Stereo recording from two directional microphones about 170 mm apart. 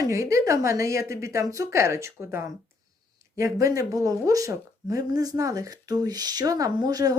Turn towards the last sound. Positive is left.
turn(degrees=-20)  # may be behind; listen again after turning